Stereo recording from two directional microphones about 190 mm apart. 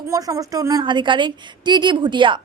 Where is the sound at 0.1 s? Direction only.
20° right (ahead or behind).